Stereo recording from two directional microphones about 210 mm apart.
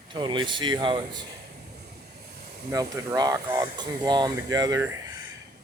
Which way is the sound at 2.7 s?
15° right (ahead or behind).